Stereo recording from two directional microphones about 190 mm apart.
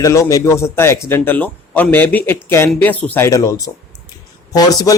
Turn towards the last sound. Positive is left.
turn(degrees=20)  # may be behind; listen again after turning